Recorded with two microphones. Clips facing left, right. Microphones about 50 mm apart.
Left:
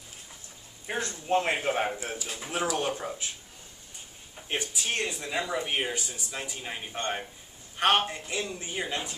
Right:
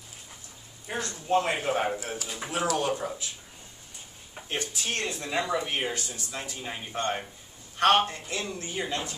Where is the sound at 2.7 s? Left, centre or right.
Left.